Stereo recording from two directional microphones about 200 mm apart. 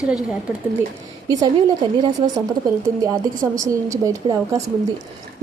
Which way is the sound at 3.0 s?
15° right (ahead or behind).